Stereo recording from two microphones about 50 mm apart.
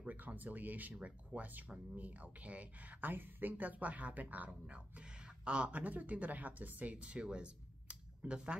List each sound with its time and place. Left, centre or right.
0.0 s speech: right
5.4 s speech: right
7.9 s a sound: right